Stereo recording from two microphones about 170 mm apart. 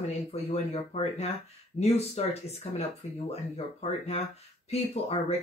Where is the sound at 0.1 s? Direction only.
35° left (ahead or behind).